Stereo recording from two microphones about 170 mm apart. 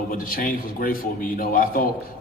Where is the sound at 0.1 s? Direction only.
55° left (ahead or behind).